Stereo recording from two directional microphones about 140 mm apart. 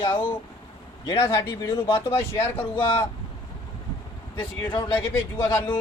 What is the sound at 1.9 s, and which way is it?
Speech, 20° left (ahead or behind).